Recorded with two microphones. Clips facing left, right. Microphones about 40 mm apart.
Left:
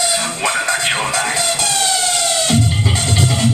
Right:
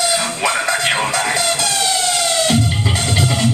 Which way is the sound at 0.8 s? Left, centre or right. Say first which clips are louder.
Right 1 dB; centre.